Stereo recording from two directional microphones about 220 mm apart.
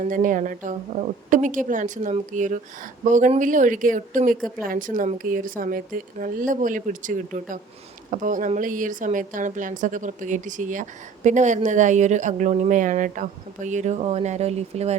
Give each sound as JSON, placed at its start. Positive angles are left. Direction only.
{"t": 0.0, "sound": "a woman's voice", "side_deg": -35}